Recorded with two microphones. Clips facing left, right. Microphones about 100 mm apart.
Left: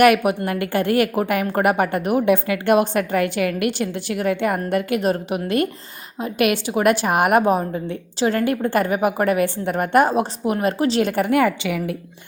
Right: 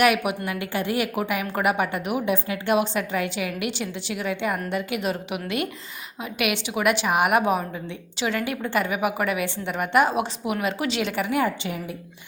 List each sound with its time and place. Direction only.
0.0 s a woman's voice: 50° left (ahead or behind); by 11.9 s 80° left